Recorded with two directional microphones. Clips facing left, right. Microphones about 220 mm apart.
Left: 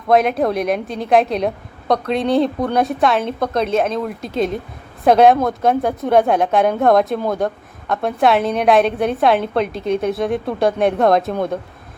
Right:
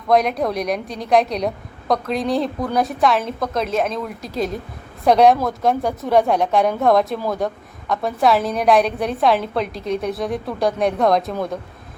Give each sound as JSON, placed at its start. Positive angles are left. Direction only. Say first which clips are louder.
{"t": 0.1, "sound": "a woman's voice", "louder": "left 3 dB", "side_deg": 0}